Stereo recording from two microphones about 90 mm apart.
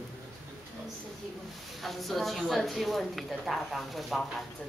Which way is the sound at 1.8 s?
Centre (ahead or behind).